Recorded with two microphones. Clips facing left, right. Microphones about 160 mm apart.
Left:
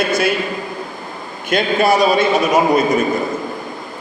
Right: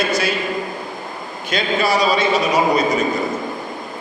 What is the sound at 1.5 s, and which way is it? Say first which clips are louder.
A man's voice: left 4 dB; 55° left (ahead or behind).